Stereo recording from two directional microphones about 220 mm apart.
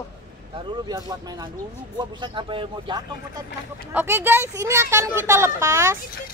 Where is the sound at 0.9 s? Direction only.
15° right (ahead or behind).